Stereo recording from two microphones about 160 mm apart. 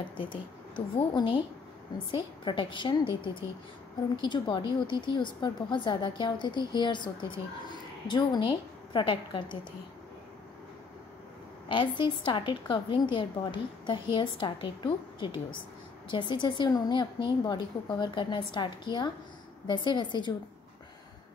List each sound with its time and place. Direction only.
0.7 s a woman's voice: 30° left (ahead or behind)
11.7 s a woman's voice: 30° left (ahead or behind)